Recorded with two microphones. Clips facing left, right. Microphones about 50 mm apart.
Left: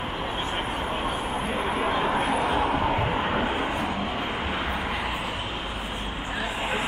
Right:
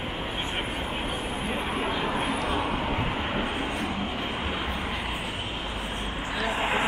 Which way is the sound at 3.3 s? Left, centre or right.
Left.